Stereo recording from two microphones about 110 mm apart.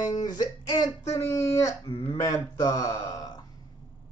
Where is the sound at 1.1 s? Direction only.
25° left (ahead or behind).